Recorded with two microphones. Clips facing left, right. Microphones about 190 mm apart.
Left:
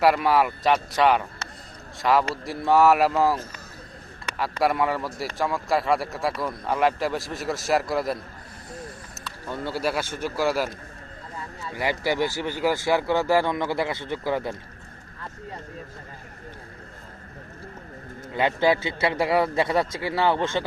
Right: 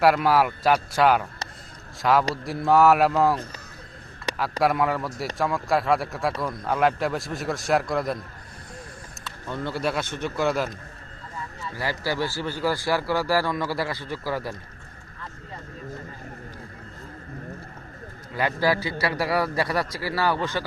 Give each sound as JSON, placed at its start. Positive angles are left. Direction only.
{"t": 0.0, "sound": "a man's voice", "side_deg": 0}
{"t": 4.6, "sound": "a man's voice", "side_deg": 0}
{"t": 9.5, "sound": "a man's voice", "side_deg": 5}
{"t": 11.7, "sound": "speech", "side_deg": 20}
{"t": 18.3, "sound": "speech", "side_deg": 25}